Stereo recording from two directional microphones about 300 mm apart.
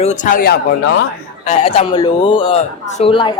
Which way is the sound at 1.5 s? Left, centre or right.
Centre.